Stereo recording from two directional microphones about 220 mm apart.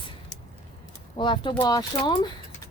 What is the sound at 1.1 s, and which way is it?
Speech, 20° left (ahead or behind).